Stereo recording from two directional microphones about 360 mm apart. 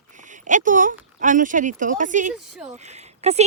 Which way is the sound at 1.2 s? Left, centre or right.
Right.